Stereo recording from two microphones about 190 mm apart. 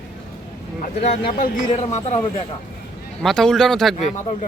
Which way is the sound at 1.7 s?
35° left (ahead or behind).